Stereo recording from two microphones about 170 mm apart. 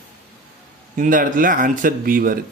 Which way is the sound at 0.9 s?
50° right (ahead or behind).